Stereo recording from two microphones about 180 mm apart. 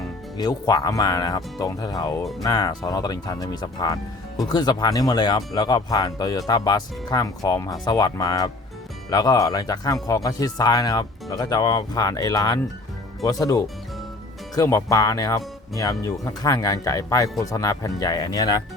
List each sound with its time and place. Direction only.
0.3 s speech: 20° left (ahead or behind)